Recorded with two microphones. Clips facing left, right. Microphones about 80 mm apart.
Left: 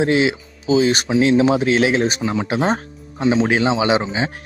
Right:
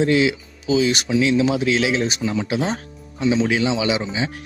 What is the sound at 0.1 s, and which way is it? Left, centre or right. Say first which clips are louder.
Speech: left 1 dB; left.